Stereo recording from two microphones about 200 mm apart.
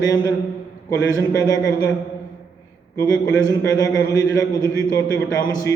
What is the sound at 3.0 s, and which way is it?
A man's voice, 15° left (ahead or behind).